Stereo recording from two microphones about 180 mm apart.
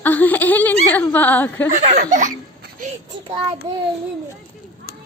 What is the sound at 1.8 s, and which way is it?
Speech, 45° right (ahead or behind).